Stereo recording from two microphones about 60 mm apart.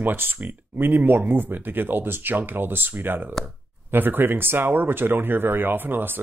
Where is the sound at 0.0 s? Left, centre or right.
Right.